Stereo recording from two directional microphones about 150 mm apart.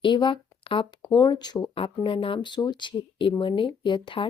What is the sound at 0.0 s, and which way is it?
Speech, 30° left (ahead or behind).